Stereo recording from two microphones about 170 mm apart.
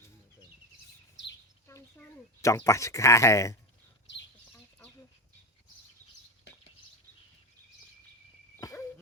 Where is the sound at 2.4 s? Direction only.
15° left (ahead or behind).